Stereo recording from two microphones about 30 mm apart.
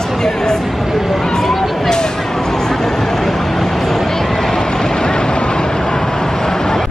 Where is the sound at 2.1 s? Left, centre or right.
Centre.